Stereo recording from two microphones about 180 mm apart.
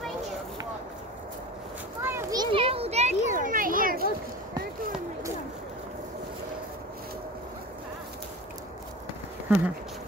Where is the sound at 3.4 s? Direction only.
50° right (ahead or behind).